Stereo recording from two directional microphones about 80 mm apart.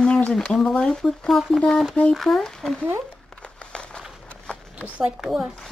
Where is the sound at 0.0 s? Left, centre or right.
Centre.